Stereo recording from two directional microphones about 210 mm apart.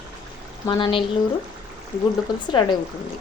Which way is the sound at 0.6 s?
25° left (ahead or behind).